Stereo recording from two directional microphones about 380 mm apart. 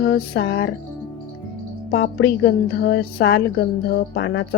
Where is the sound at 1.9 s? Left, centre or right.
Left.